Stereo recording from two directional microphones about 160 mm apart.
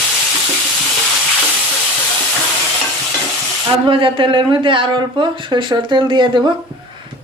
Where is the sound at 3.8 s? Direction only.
30° right (ahead or behind).